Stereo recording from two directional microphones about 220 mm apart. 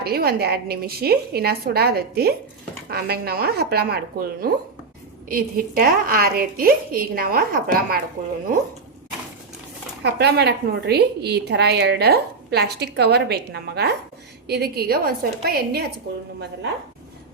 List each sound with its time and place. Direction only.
0.0 s a woman's voice: 45° right (ahead or behind)
10.0 s a woman's voice: 50° right (ahead or behind)